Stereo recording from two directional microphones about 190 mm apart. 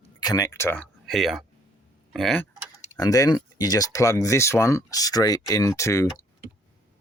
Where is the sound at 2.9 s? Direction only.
20° left (ahead or behind).